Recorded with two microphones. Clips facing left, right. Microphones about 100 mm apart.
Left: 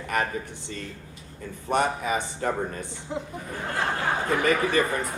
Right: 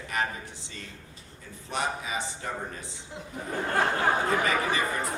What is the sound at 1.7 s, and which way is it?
Speech, 55° left (ahead or behind).